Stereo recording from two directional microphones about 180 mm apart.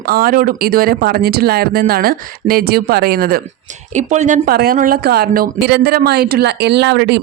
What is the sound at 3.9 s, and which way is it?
Speech, 40° right (ahead or behind).